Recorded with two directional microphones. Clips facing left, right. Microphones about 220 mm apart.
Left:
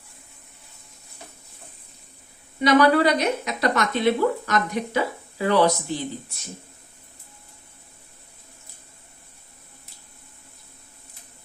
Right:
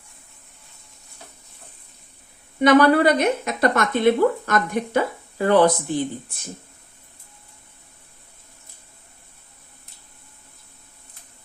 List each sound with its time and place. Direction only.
2.6 s speech: 50° right (ahead or behind)